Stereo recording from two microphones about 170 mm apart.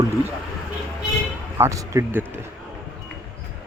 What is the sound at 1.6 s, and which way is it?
Speech, 15° right (ahead or behind).